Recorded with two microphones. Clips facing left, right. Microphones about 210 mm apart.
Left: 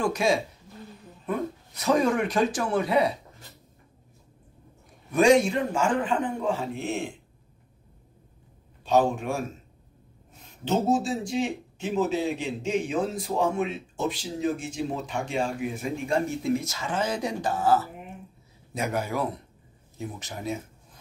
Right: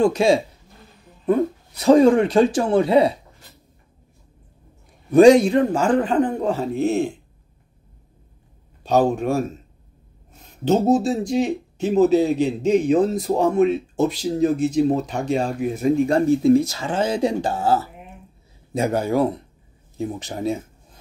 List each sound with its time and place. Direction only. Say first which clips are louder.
0.0 s speech: right 8 dB; 30° right (ahead or behind)
1.8 s speech: right 10 dB; 30° right (ahead or behind)
5.1 s speech: right 8 dB; 35° right (ahead or behind)
8.8 s speech: right 5 dB; 40° right (ahead or behind)
10.6 s speech: right 7 dB; 40° right (ahead or behind)